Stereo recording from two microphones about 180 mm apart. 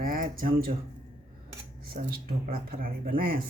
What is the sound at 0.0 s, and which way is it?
Speech, 50° right (ahead or behind).